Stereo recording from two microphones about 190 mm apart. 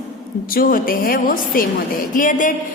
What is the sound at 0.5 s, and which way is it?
A woman's voice, 50° left (ahead or behind).